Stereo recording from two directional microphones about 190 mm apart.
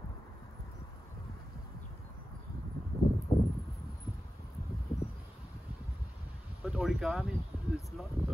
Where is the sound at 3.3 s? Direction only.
15° left (ahead or behind).